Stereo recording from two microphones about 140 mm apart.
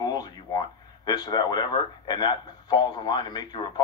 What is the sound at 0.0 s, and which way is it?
Speech, 30° left (ahead or behind).